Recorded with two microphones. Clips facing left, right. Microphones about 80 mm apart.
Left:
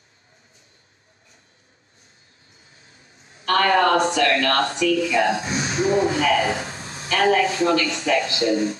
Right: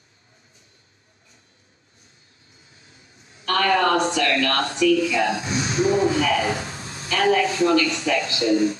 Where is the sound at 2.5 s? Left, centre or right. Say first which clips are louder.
Even; left.